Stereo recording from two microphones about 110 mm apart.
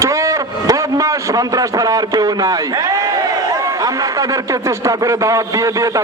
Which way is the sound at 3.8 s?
30° right (ahead or behind).